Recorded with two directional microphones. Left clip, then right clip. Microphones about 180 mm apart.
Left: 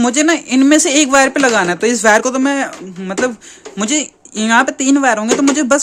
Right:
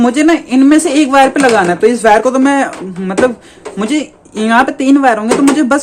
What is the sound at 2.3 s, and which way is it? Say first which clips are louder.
Speech: right 5 dB; 25° left (ahead or behind).